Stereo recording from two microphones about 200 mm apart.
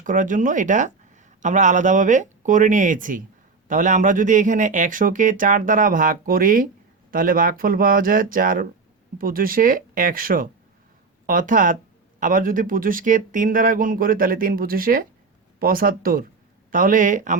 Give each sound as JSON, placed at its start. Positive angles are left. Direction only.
{"t": 0.0, "sound": "speech", "side_deg": -40}